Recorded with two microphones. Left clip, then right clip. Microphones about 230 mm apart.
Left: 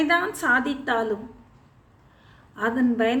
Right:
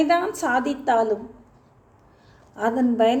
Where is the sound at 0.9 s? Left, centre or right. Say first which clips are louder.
Right 7 dB; centre.